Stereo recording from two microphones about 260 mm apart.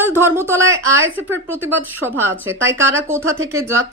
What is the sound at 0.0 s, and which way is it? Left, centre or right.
Speech, centre.